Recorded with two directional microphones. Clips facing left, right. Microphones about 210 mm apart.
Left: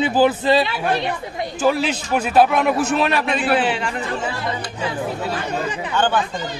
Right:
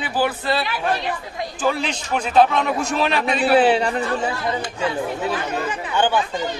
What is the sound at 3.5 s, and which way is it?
Speech, 35° right (ahead or behind).